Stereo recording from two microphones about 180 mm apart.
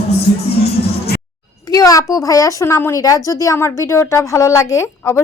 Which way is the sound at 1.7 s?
20° left (ahead or behind).